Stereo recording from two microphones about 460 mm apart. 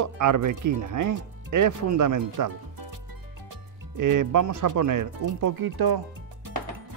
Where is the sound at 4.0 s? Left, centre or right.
Right.